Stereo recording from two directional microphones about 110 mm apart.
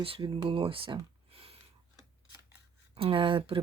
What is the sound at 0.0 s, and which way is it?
Speech, 55° right (ahead or behind).